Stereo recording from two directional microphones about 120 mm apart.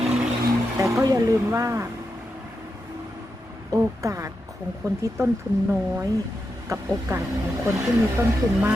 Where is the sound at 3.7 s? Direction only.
30° right (ahead or behind).